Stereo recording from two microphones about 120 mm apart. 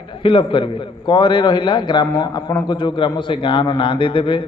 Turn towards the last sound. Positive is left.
turn(degrees=45)  # may be behind; listen again after turning